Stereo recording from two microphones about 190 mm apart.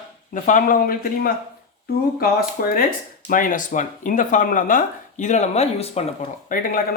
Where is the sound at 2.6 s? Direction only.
50° left (ahead or behind); by 6.1 s 35° left (ahead or behind).